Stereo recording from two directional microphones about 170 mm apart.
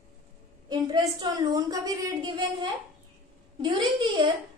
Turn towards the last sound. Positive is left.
turn(degrees=-30)  # may be behind; listen again after turning